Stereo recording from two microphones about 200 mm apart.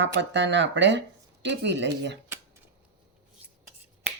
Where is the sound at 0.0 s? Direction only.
65° right (ahead or behind).